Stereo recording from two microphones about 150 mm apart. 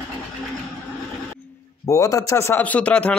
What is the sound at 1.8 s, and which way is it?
Speech, 20° left (ahead or behind).